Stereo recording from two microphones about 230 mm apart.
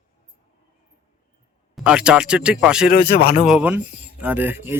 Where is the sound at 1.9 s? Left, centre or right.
Centre.